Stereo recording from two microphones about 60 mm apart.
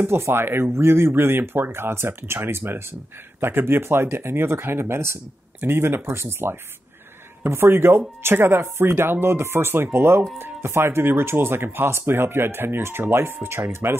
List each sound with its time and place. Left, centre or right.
0.0 s speech: right